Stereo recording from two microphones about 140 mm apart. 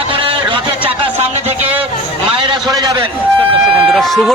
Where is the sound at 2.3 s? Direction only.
30° right (ahead or behind).